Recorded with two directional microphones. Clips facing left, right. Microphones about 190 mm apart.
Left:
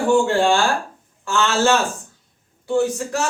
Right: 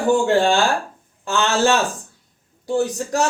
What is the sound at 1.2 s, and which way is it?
Speech, 20° right (ahead or behind).